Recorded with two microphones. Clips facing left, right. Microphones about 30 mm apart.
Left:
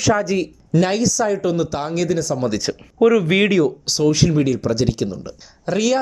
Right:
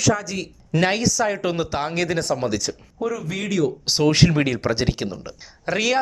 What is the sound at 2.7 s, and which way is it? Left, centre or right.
Speech, left.